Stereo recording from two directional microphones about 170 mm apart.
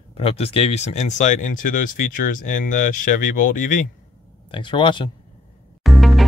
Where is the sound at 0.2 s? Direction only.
35° left (ahead or behind).